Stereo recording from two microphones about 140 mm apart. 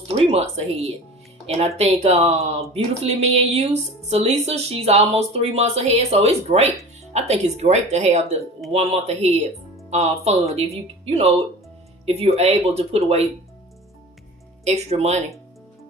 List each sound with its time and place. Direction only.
0.3 s speech: 50° right (ahead or behind)
12.4 s speech: 50° right (ahead or behind)
14.6 s speech: 55° right (ahead or behind)